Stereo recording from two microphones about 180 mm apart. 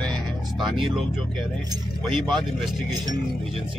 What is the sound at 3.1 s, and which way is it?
Speech, 30° right (ahead or behind).